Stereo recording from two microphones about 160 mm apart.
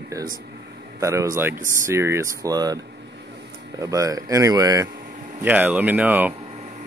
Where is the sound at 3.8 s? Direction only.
20° right (ahead or behind).